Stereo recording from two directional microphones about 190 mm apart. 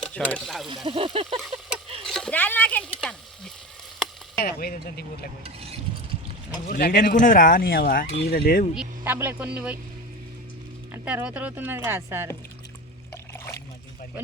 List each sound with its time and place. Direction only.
0.0 s speech: 5° left (ahead or behind)
0.9 s speech: 30° right (ahead or behind)
1.4 s a sound: centre (ahead or behind)
2.0 s frying: 5° left (ahead or behind)
4.4 s speech: 50° left (ahead or behind)
5.4 s stir: 30° right (ahead or behind)
6.7 s speech: 50° left (ahead or behind)
8.7 s speech: 10° right (ahead or behind)
10.9 s speech: 5° right (ahead or behind)
13.3 s trickle: 10° left (ahead or behind)